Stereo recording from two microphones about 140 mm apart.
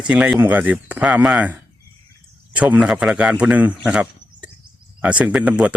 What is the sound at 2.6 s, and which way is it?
A man's voice, 10° right (ahead or behind).